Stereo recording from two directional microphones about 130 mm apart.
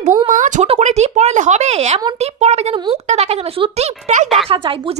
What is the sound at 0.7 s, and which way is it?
Speech, 60° right (ahead or behind).